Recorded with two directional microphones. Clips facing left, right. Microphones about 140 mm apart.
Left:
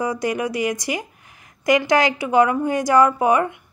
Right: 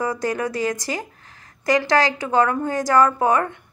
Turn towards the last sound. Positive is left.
turn(degrees=15)  # may be behind; listen again after turning